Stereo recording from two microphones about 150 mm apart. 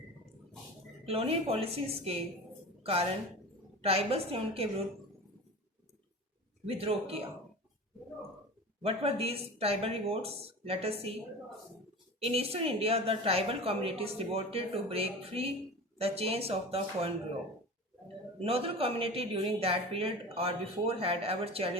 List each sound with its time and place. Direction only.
1.0 s a woman's voice: 40° right (ahead or behind)
6.7 s a woman's voice: 40° right (ahead or behind)
8.8 s a woman's voice: 45° right (ahead or behind)
12.2 s a woman's voice: 40° right (ahead or behind)
18.3 s a woman's voice: 40° right (ahead or behind)